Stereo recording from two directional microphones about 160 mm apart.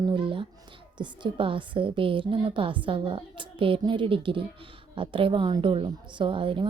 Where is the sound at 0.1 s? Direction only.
30° right (ahead or behind).